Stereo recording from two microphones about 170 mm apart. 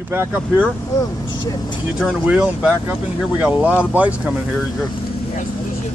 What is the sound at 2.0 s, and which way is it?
Speech, 5° right (ahead or behind).